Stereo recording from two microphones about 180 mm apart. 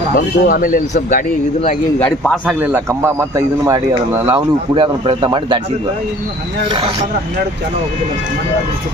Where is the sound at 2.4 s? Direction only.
5° right (ahead or behind).